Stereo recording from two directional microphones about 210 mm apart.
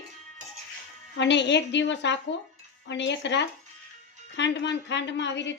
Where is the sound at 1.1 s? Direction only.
55° left (ahead or behind).